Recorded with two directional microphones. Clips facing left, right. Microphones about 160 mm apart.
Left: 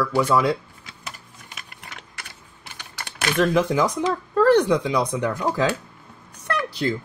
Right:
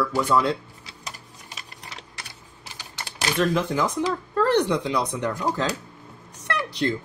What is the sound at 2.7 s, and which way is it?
Typing, 30° right (ahead or behind).